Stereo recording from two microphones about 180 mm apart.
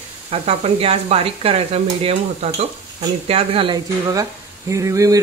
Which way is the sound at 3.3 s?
30° right (ahead or behind).